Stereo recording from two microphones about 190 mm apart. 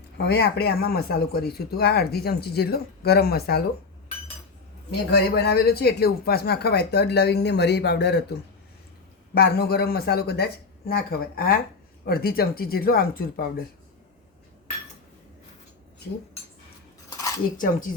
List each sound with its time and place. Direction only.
0.2 s speech: 55° left (ahead or behind)
4.9 s speech: 60° left (ahead or behind)
17.2 s dishes: 15° left (ahead or behind)
17.6 s speech: 45° left (ahead or behind)